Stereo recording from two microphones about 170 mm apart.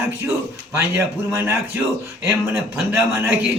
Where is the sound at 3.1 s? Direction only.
15° right (ahead or behind).